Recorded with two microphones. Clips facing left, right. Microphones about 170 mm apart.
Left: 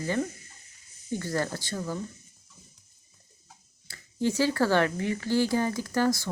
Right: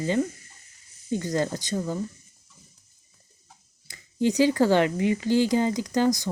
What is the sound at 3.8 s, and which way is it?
Speech, 15° right (ahead or behind).